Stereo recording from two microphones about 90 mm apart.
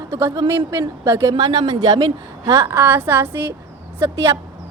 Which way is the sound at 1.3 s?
55° right (ahead or behind).